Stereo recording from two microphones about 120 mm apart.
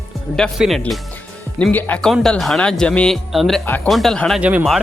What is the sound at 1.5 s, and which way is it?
Speech, 10° left (ahead or behind).